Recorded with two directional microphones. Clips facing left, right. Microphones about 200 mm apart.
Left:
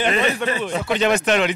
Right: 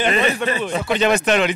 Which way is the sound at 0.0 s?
10° right (ahead or behind).